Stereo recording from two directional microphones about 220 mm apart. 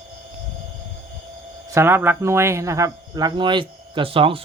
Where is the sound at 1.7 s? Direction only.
10° right (ahead or behind).